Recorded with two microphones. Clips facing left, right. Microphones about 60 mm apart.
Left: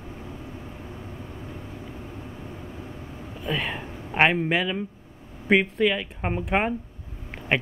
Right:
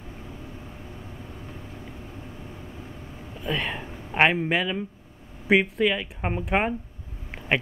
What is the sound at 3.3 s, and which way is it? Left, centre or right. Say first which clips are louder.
Speech: even; centre.